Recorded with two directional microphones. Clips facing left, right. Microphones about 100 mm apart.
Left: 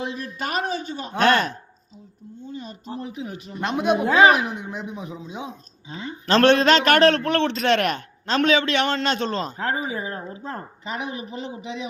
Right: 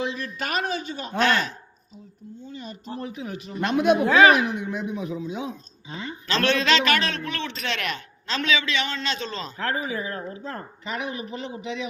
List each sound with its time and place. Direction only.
0.2 s a woman's voice: 30° left (ahead or behind)
1.2 s a man's voice: 50° left (ahead or behind)
2.6 s speech: 30° left (ahead or behind)
6.2 s a man's voice: 50° left (ahead or behind)
9.6 s a woman's voice: 25° left (ahead or behind)